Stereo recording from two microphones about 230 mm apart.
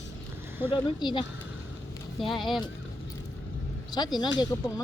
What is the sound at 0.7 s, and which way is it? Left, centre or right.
Speech, centre.